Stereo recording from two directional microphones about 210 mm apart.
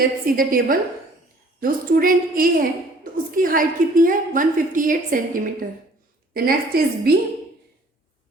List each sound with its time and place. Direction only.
0.0 s a woman's voice: 40° right (ahead or behind)